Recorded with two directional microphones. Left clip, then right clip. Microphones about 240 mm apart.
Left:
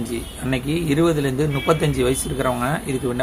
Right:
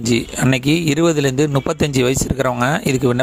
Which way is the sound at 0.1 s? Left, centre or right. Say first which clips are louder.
Right 12 dB; right.